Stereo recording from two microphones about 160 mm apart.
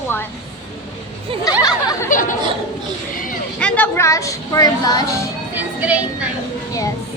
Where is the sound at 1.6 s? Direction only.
25° left (ahead or behind).